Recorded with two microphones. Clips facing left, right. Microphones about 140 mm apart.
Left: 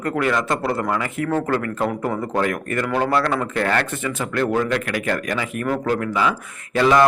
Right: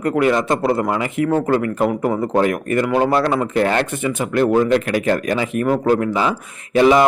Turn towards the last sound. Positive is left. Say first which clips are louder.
# right 3 dB
turn(degrees=-20)  # may be behind; listen again after turning